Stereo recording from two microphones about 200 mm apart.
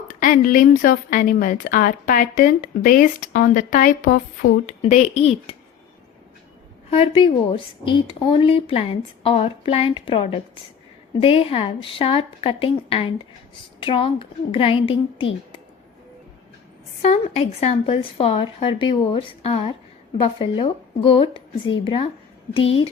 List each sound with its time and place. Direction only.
0.1 s a woman's voice: 45° left (ahead or behind)
6.9 s a woman's voice: 25° left (ahead or behind)
17.0 s a woman's voice: 35° left (ahead or behind)